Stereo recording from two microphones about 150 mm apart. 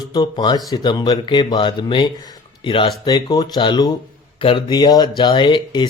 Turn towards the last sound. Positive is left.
turn(degrees=35)  # may be behind; listen again after turning